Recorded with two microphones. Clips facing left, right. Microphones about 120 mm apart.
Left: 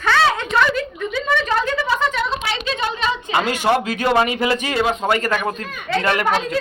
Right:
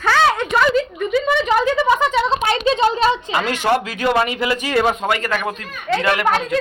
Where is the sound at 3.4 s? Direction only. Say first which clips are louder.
Left 1 dB; 15° left (ahead or behind).